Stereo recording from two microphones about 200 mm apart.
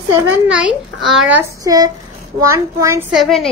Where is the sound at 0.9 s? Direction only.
Centre (ahead or behind).